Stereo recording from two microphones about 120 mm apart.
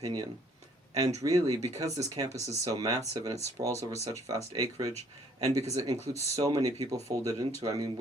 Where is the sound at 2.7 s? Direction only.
30° right (ahead or behind).